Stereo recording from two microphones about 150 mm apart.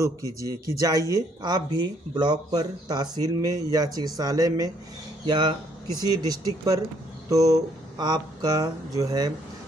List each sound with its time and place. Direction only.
0.0 s speech: 20° right (ahead or behind)